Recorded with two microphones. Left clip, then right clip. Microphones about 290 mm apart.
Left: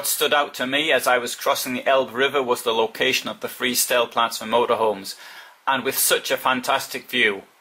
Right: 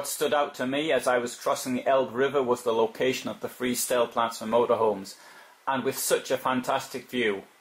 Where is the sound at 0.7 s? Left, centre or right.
Centre.